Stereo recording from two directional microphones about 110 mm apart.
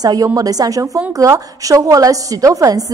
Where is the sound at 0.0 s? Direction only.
35° right (ahead or behind).